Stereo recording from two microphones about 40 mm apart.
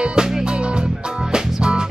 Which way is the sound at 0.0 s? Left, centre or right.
Right.